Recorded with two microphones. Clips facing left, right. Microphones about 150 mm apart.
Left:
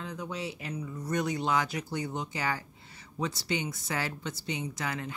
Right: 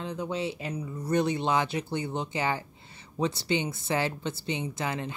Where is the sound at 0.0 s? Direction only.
25° right (ahead or behind).